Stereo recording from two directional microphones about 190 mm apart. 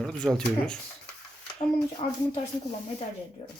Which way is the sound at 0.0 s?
5° left (ahead or behind).